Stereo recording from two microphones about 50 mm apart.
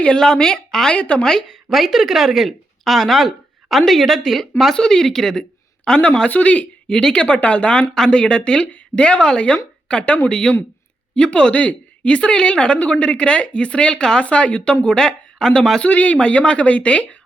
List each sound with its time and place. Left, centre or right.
0.2 s speech: centre
0.9 s a woman's voice: left
1.2 s a woman's voice: centre; by 6.9 s left
6.9 s speech: centre
7.3 s a woman's voice: left; by 15.8 s centre
15.8 s a woman's voice: left